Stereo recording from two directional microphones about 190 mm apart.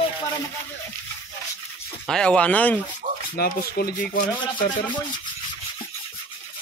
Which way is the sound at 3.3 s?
50° left (ahead or behind).